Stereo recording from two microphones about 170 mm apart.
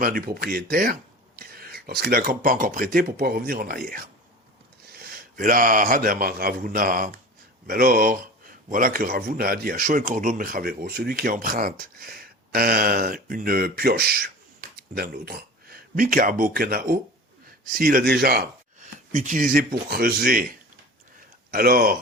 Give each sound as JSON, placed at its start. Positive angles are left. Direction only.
{"t": 0.0, "sound": "speech", "side_deg": -60}
{"t": 18.8, "sound": "speech", "side_deg": -45}
{"t": 21.2, "sound": "a sound", "side_deg": -60}